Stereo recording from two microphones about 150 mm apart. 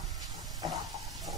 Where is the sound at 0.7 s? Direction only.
Centre (ahead or behind).